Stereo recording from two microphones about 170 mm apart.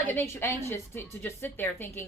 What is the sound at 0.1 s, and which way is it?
A woman's voice, 10° left (ahead or behind).